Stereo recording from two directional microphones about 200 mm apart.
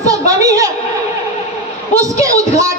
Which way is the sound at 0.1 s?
15° right (ahead or behind).